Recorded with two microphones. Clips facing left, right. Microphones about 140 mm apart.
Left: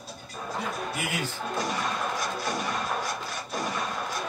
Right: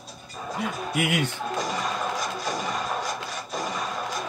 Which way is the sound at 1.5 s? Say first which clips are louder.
Right 1 dB; centre (ahead or behind).